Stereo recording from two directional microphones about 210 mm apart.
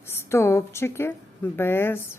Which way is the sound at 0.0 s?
10° left (ahead or behind).